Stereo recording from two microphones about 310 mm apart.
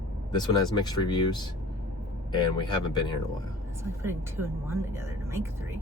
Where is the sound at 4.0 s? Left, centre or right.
Centre.